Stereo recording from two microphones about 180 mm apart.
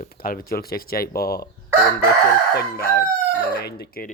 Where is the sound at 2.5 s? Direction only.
60° left (ahead or behind).